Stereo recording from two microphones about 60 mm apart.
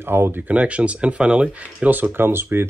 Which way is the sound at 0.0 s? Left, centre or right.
Right.